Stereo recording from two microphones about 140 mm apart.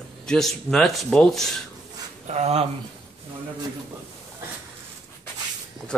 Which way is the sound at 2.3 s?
50° right (ahead or behind).